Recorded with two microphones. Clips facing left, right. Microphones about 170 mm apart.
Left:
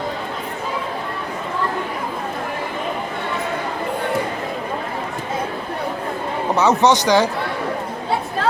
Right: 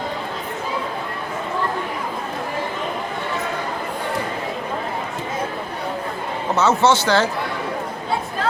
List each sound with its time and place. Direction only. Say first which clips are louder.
6.6 s speech: left 1 dB; 15° left (ahead or behind)